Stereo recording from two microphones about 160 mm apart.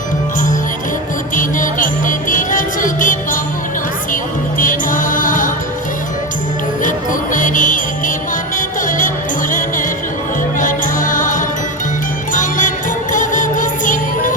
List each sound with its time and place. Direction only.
1.4 s music: 55° left (ahead or behind)
6.8 s music: 55° left (ahead or behind)